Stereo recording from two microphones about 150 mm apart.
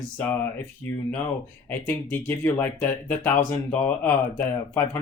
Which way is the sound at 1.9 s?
10° left (ahead or behind).